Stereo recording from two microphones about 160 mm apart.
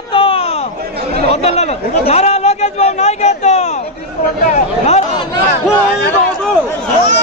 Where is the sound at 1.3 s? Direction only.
40° left (ahead or behind).